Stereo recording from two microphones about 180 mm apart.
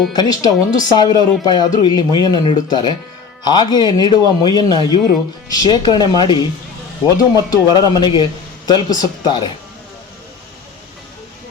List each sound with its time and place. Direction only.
0.1 s a man's voice: 20° left (ahead or behind)